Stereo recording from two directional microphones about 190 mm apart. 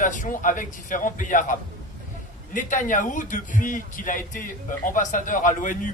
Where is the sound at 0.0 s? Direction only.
45° left (ahead or behind).